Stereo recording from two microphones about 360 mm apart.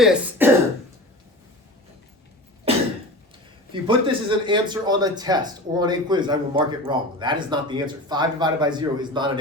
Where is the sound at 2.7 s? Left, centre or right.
Centre.